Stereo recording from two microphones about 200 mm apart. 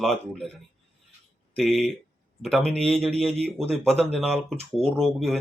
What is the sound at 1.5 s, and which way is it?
Speech, centre (ahead or behind).